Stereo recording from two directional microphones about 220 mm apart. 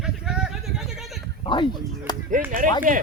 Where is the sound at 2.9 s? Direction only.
35° right (ahead or behind).